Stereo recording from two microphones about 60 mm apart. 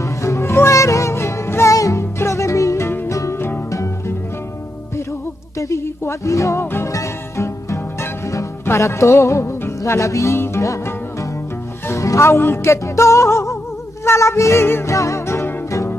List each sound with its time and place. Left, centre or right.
0.0 s music: left
3.3 s music: left
5.6 s music: left
6.6 s music: left
6.9 s music: left
10.3 s music: left
11.9 s music: left
15.0 s music: left